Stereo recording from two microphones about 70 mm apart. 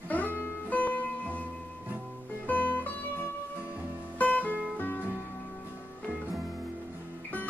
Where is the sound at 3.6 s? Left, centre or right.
Right.